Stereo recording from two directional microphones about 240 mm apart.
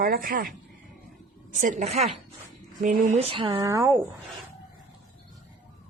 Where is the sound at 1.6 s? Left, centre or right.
Right; by 3.9 s centre.